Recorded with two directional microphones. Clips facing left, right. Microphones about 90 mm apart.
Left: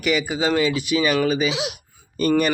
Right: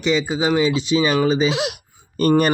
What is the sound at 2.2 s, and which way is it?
Speech, 40° right (ahead or behind).